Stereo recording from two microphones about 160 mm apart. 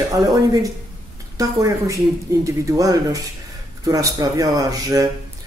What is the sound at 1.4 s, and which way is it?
Speech, 20° right (ahead or behind).